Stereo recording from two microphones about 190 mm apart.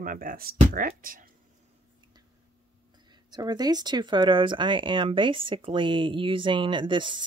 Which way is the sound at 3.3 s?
20° right (ahead or behind).